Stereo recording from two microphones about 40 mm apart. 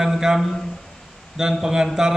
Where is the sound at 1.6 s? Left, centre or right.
Centre.